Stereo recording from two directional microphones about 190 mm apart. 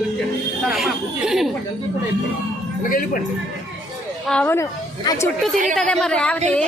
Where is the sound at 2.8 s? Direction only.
45° left (ahead or behind).